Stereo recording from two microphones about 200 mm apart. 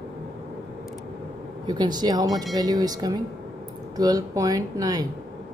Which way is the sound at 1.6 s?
20° right (ahead or behind).